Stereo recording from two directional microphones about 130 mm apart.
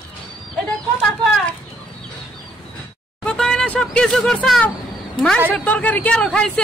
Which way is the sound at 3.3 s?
5° left (ahead or behind).